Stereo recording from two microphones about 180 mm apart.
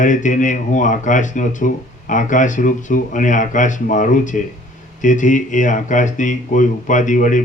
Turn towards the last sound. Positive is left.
turn(degrees=45)  # may be behind; listen again after turning